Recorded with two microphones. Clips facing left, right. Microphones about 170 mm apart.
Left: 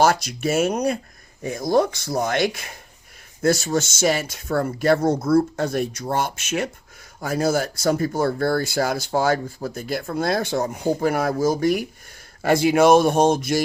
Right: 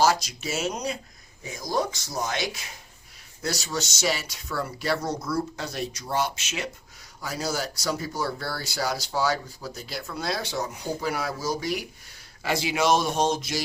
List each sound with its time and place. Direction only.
0.0 s speech: 55° left (ahead or behind)